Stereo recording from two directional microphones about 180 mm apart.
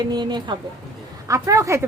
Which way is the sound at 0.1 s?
25° right (ahead or behind).